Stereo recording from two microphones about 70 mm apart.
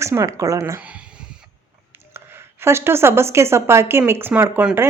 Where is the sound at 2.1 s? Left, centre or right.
Right.